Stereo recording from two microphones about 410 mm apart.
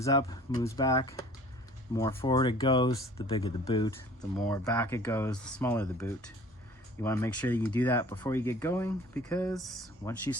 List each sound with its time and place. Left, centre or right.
0.0 s speech: centre